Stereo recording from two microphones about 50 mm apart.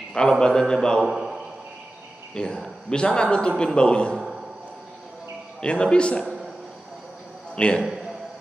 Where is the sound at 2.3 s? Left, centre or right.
Centre.